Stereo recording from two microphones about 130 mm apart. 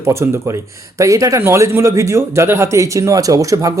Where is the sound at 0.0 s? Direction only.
20° right (ahead or behind).